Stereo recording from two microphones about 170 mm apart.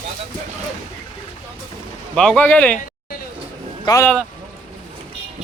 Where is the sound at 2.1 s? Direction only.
5° left (ahead or behind).